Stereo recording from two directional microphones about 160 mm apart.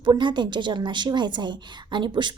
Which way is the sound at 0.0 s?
30° right (ahead or behind).